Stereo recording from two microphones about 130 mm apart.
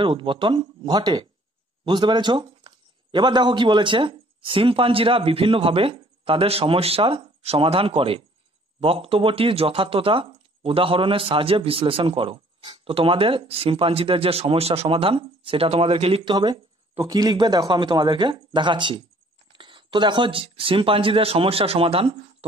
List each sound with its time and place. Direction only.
0.0 s a man's voice: 40° right (ahead or behind)
17.1 s speech: 35° right (ahead or behind)